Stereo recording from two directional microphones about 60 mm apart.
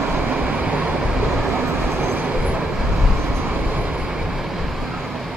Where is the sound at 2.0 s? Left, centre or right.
Right.